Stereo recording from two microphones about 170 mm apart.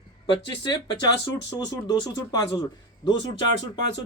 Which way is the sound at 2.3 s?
25° left (ahead or behind).